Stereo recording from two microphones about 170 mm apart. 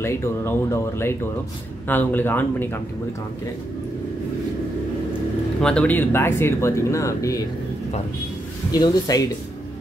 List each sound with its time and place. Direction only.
0.0 s speech: 15° left (ahead or behind)
5.6 s speech: 5° left (ahead or behind)
8.7 s speech: 20° left (ahead or behind)